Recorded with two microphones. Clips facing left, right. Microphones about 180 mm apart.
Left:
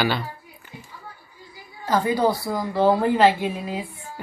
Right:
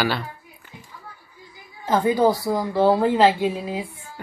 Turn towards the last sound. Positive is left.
turn(degrees=-15)  # may be behind; listen again after turning